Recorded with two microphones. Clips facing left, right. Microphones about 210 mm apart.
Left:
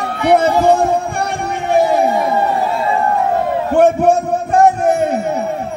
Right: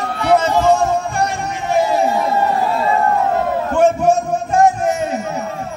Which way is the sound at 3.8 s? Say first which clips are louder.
Left 2 dB; 60° left (ahead or behind).